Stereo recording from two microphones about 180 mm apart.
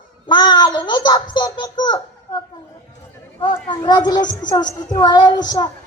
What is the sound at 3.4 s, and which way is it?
A child's voice, 25° left (ahead or behind).